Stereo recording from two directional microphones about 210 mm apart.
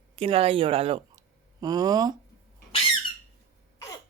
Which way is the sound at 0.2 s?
25° right (ahead or behind).